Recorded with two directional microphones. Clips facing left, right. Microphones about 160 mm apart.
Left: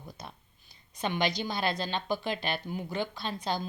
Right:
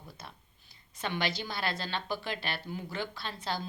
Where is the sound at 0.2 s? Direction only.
20° left (ahead or behind).